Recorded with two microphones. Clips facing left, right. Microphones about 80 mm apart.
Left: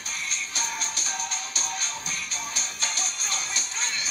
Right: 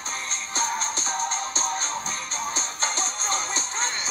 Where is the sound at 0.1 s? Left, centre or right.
Right.